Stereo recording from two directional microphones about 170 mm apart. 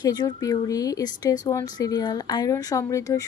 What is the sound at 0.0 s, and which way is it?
Speech, 20° left (ahead or behind).